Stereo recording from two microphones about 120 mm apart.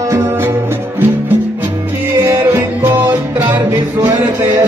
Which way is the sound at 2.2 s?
20° right (ahead or behind).